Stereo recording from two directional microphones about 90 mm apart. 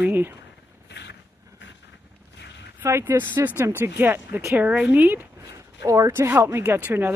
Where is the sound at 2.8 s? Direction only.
25° right (ahead or behind).